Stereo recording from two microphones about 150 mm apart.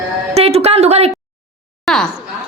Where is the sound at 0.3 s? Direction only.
45° right (ahead or behind).